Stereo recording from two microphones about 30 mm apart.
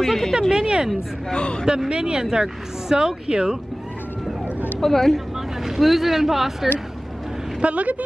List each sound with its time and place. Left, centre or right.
0.0 s speech: centre
0.3 s speech: centre
1.3 s a man's voice: left
1.9 s speech: right
4.7 s speech: centre
5.6 s speech: centre
7.6 s speech: right